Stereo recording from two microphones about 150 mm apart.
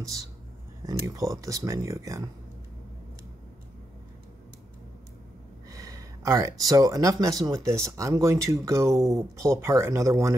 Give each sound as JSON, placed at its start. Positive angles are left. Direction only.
{"t": 0.8, "sound": "speech", "side_deg": -20}
{"t": 5.7, "sound": "speech", "side_deg": -20}